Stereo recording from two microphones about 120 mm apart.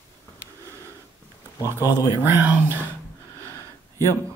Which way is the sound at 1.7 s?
35° left (ahead or behind).